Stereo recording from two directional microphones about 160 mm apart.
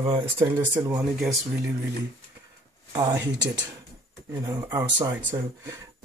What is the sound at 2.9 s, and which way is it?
Speech, 25° right (ahead or behind).